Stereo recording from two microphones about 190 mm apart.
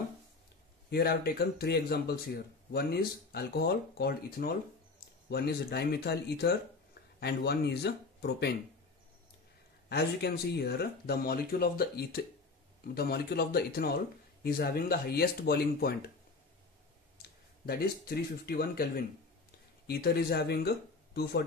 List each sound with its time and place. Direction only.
0.8 s speech: 55° left (ahead or behind)
9.8 s speech: 60° left (ahead or behind)
17.6 s speech: 55° left (ahead or behind)